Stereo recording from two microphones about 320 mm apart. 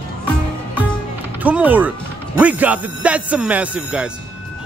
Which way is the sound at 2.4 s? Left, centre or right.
Centre.